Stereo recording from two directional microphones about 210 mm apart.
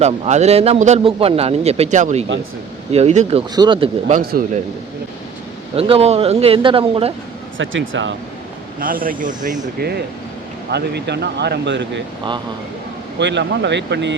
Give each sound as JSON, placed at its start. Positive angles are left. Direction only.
{"t": 0.0, "sound": "a man's voice", "side_deg": -30}
{"t": 3.5, "sound": "speech", "side_deg": -20}
{"t": 4.2, "sound": "speech", "side_deg": -45}
{"t": 5.7, "sound": "speech", "side_deg": -25}
{"t": 7.6, "sound": "speech", "side_deg": -65}
{"t": 8.8, "sound": "a man's voice", "side_deg": -40}
{"t": 10.7, "sound": "speech", "side_deg": -50}
{"t": 13.1, "sound": "speech", "side_deg": -55}